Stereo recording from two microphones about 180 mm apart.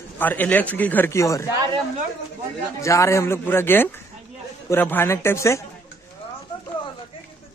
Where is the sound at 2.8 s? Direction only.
15° left (ahead or behind).